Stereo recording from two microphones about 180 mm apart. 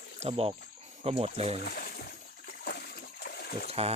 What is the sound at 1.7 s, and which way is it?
Splash, 55° left (ahead or behind).